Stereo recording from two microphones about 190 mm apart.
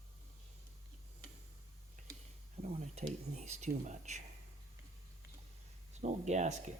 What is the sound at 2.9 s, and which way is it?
Speech, 35° right (ahead or behind).